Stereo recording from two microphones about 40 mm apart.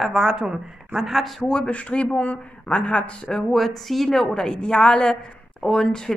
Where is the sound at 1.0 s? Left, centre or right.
Centre.